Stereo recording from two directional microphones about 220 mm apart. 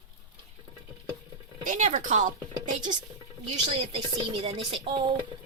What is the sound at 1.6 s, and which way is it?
Speech, 35° right (ahead or behind).